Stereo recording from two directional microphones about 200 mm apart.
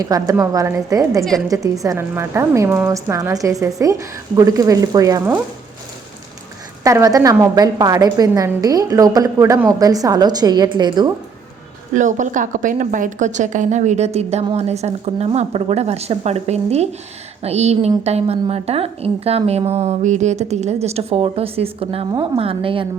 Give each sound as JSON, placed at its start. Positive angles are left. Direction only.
{"t": 0.0, "sound": "a woman's voice", "side_deg": -15}
{"t": 6.8, "sound": "a woman's voice", "side_deg": -15}
{"t": 11.9, "sound": "a woman's voice", "side_deg": -40}